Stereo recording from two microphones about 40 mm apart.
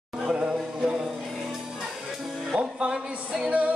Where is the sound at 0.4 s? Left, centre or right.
Right.